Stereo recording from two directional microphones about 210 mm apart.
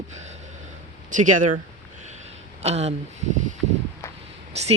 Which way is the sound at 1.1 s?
35° right (ahead or behind).